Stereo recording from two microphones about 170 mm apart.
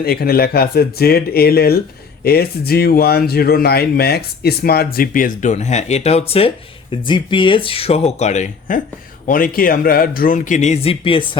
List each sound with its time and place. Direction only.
0.0 s a man's voice: 65° left (ahead or behind); by 11.3 s 30° left (ahead or behind)